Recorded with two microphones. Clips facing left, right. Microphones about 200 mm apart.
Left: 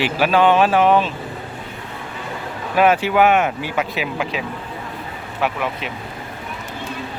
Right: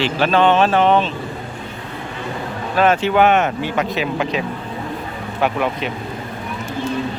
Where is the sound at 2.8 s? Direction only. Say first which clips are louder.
Even; 10° left (ahead or behind).